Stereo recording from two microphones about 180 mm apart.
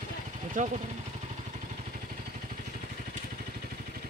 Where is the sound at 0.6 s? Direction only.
45° right (ahead or behind).